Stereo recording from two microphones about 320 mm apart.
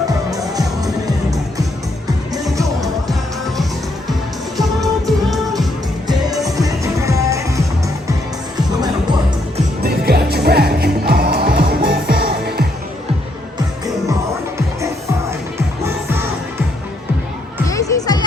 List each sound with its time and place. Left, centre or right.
0.3 s music: centre
2.3 s music: centre
4.5 s music: centre
6.1 s music: centre
9.8 s music: right
15.3 s music: centre
17.7 s music: centre